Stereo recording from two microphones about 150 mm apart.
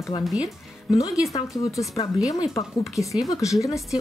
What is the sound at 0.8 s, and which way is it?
Speech, 25° left (ahead or behind).